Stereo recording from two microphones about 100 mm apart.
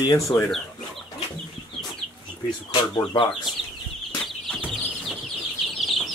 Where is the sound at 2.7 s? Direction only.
50° left (ahead or behind).